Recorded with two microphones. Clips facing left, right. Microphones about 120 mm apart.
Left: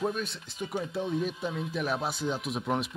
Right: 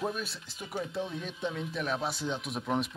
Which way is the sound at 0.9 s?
5° left (ahead or behind).